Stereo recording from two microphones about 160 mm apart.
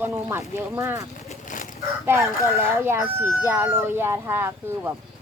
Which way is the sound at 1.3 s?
55° left (ahead or behind).